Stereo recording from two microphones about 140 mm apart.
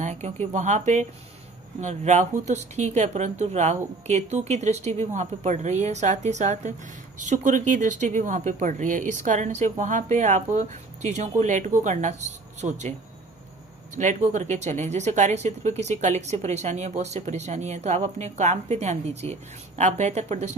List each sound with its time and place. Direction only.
0.0 s a sound: 50° right (ahead or behind)
0.5 s speech: 55° right (ahead or behind)
13.9 s speech: 60° right (ahead or behind)